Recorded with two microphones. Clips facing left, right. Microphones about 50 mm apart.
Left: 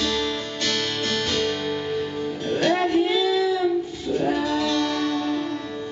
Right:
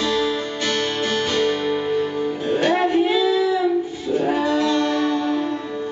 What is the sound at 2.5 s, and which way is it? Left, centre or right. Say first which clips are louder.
Child singing: right 2 dB; centre.